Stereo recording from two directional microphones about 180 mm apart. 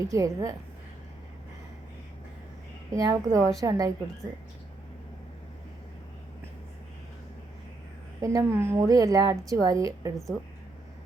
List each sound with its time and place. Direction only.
0.0 s a child's voice: 20° right (ahead or behind)
2.9 s a child's voice: 20° right (ahead or behind)
8.2 s a woman's voice: 20° right (ahead or behind)